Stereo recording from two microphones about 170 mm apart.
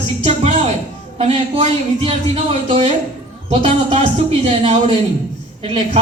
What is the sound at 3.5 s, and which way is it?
Speech, 35° right (ahead or behind).